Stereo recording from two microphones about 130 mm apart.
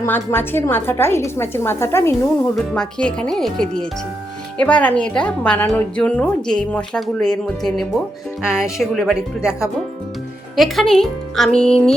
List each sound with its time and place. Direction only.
0.0 s a woman's voice: 20° left (ahead or behind)
2.6 s a woman's voice: 5° left (ahead or behind)